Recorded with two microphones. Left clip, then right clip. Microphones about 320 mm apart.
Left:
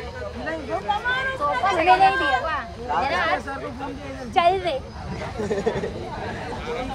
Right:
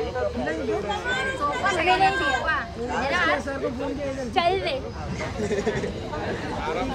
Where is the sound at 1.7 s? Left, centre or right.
Centre.